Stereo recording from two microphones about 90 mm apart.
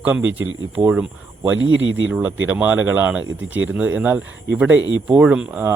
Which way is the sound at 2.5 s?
20° right (ahead or behind).